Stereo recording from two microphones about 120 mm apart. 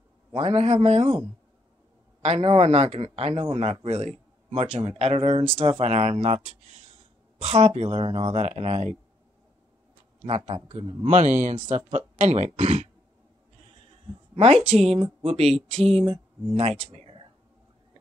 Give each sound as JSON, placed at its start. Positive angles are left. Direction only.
{"t": 0.3, "sound": "a man's voice", "side_deg": -55}
{"t": 2.2, "sound": "speech", "side_deg": -55}
{"t": 10.2, "sound": "a man's voice", "side_deg": -55}
{"t": 11.1, "sound": "a man's voice", "side_deg": -80}
{"t": 11.5, "sound": "speech", "side_deg": -60}
{"t": 12.2, "sound": "speech", "side_deg": -75}
{"t": 14.3, "sound": "a woman's voice", "side_deg": -55}
{"t": 16.5, "sound": "speech", "side_deg": -55}